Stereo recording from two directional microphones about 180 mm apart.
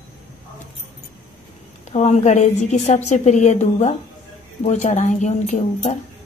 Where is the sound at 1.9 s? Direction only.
40° left (ahead or behind).